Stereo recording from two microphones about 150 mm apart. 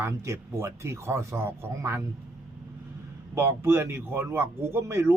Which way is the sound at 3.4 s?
15° right (ahead or behind).